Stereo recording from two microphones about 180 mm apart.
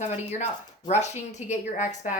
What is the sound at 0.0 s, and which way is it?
A woman's voice, 40° left (ahead or behind).